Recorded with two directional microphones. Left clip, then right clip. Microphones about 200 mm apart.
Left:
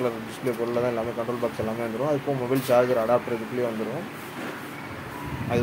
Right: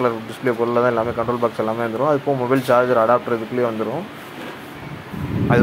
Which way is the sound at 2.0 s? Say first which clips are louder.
Right 7 dB; 20° right (ahead or behind).